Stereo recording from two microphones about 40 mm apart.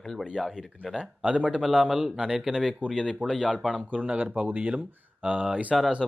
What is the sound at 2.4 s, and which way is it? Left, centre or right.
Speech, centre.